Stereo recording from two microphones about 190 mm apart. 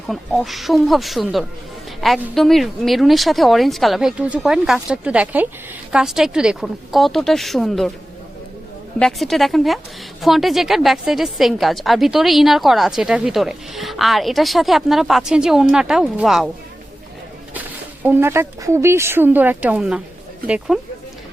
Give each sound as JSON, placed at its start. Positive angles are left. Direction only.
{"t": 0.1, "sound": "a woman's voice", "side_deg": 0}
{"t": 9.0, "sound": "a woman's voice", "side_deg": 0}
{"t": 18.0, "sound": "a woman's voice", "side_deg": -10}